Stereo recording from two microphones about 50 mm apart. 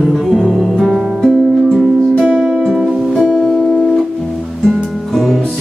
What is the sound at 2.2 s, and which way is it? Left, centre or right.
Music, centre.